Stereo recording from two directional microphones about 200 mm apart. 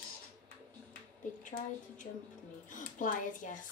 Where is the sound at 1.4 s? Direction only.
40° left (ahead or behind).